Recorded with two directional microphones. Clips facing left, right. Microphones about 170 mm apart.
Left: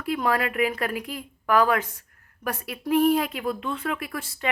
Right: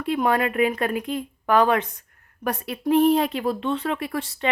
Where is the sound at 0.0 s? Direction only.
25° right (ahead or behind).